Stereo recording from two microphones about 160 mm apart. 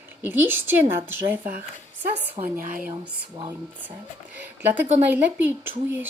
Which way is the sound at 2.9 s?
25° right (ahead or behind).